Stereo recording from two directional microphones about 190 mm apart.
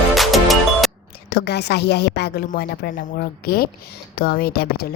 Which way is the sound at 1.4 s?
60° left (ahead or behind).